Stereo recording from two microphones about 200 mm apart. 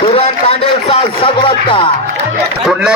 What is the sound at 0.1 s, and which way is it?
Speech, 30° left (ahead or behind).